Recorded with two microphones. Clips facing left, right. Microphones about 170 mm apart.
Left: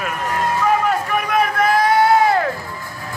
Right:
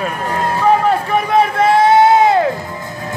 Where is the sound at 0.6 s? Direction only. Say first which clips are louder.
Right 6 dB; 30° right (ahead or behind).